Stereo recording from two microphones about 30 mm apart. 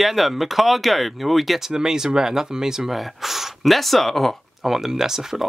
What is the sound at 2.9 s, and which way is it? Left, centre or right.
Speech, centre.